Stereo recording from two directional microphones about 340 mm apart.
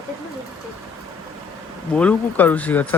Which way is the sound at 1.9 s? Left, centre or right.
Centre.